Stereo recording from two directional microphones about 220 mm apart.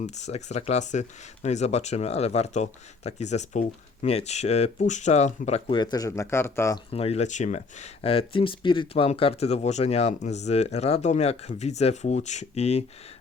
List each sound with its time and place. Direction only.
0.0 s speech: 30° left (ahead or behind); by 6.7 s 10° left (ahead or behind)
6.9 s speech: 30° left (ahead or behind)